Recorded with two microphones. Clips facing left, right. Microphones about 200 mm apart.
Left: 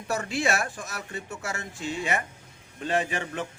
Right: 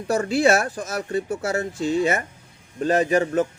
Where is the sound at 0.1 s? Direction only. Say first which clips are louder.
Right 9 dB; 40° right (ahead or behind).